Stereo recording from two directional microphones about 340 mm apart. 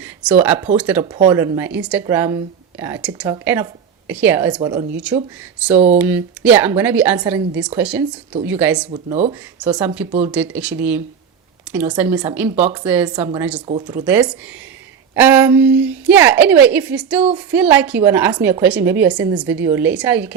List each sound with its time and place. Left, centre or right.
0.0 s a woman's voice: centre
8.9 s speech: centre
9.6 s a woman's voice: centre